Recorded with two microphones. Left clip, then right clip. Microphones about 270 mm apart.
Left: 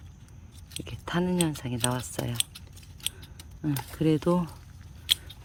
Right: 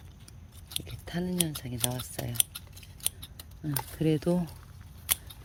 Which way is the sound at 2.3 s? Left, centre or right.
Centre.